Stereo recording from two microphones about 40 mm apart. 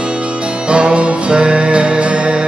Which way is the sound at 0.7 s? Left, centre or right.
Right.